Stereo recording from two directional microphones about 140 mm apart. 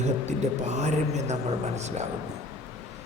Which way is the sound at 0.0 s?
55° right (ahead or behind).